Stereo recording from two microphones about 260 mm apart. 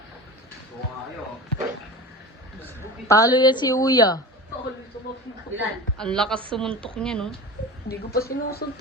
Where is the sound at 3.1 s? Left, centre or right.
Centre.